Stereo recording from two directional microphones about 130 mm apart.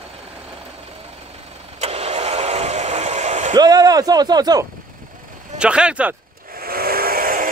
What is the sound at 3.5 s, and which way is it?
Speech, 30° right (ahead or behind).